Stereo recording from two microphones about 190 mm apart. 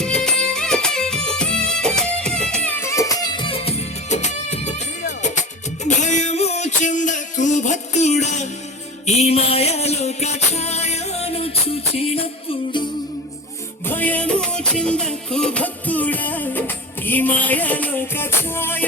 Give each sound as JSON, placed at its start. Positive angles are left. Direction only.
{"t": 0.0, "sound": "music", "side_deg": 5}
{"t": 13.8, "sound": "music", "side_deg": 10}